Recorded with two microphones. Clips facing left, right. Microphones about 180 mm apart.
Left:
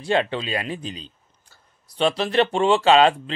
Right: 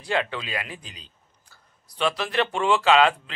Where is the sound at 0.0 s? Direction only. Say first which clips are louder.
Left 5 dB; 30° left (ahead or behind).